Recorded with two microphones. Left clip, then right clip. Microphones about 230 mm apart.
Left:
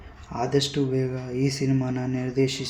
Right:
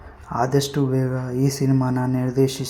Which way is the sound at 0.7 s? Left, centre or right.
Centre.